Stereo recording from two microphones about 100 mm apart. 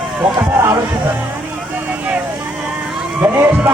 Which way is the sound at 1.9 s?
20° right (ahead or behind).